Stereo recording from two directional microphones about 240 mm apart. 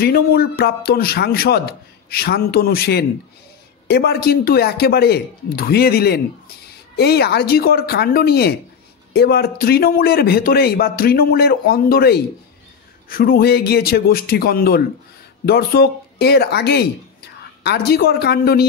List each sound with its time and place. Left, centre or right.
0.0 s a man's voice: left